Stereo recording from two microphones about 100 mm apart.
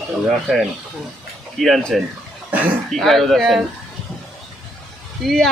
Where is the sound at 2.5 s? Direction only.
15° right (ahead or behind).